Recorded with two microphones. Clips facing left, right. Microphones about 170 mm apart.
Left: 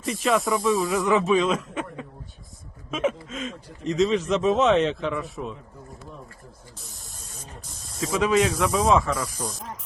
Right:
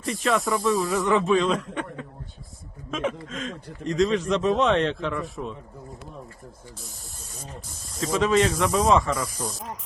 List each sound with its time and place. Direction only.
0.0 s speech: centre (ahead or behind)
7.8 s speech: 5° left (ahead or behind)